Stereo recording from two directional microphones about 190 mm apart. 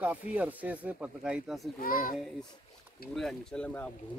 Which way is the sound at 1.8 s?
50° left (ahead or behind).